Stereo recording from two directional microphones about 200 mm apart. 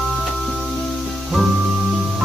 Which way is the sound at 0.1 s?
Centre (ahead or behind).